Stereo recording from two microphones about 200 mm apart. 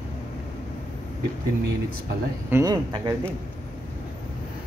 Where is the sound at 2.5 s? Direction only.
15° right (ahead or behind).